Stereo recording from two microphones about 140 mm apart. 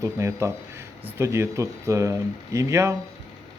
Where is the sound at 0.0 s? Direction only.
20° right (ahead or behind).